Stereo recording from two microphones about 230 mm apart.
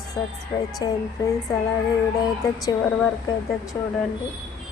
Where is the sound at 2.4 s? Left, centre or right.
Centre.